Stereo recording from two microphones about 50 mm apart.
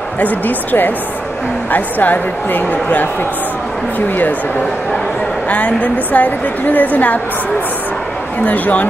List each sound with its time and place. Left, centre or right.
0.2 s a woman's voice: left
5.5 s a woman's voice: left
8.5 s a woman's voice: left